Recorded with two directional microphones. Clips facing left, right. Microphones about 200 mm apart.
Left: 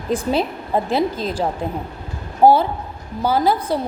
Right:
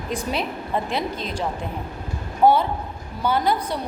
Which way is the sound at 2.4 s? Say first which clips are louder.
Left 4 dB; 30° left (ahead or behind).